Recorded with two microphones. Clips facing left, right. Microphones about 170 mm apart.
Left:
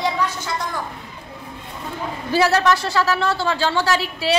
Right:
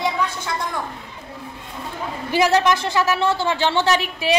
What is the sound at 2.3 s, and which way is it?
A woman's voice, 15° right (ahead or behind).